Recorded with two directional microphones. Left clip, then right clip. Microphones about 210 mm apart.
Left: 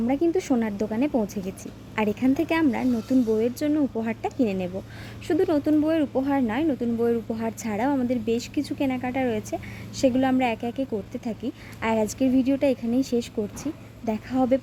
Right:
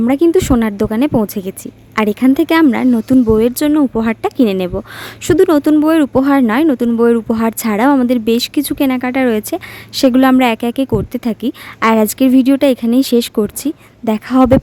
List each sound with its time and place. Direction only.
0.0 s speech: 40° right (ahead or behind)